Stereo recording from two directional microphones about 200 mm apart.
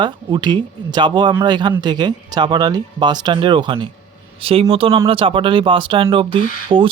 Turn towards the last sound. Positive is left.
turn(degrees=-25)  # may be behind; listen again after turning